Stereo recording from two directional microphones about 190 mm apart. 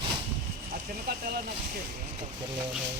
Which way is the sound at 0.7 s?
55° right (ahead or behind).